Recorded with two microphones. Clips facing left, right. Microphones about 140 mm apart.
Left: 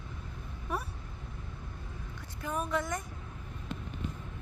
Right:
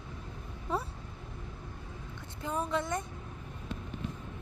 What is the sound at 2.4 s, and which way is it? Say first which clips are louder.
Speech: even; 25° right (ahead or behind).